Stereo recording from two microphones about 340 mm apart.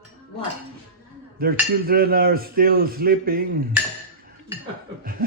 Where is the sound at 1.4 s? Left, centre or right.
Right.